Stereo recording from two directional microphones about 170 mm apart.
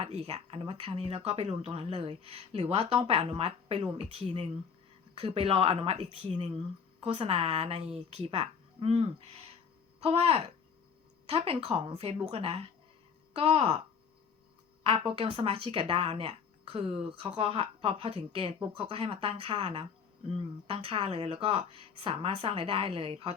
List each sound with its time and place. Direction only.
0.0 s speech: 40° right (ahead or behind)
14.8 s speech: 30° right (ahead or behind)